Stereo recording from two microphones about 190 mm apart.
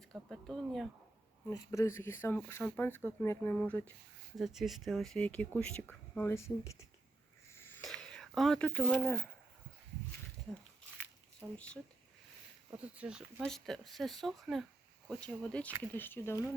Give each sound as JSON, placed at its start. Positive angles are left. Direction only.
{"t": 0.1, "sound": "speech", "side_deg": 0}
{"t": 1.5, "sound": "speech", "side_deg": 15}
{"t": 7.9, "sound": "speech", "side_deg": 5}
{"t": 11.3, "sound": "speech", "side_deg": 5}
{"t": 12.7, "sound": "speech", "side_deg": -5}